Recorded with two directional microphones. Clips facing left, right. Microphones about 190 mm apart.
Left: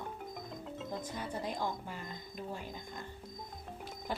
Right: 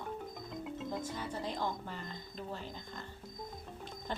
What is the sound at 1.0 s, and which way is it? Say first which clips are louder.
Speech: even; 10° left (ahead or behind).